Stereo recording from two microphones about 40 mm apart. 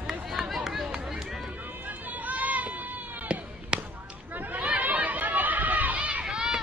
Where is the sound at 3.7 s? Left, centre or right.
Right.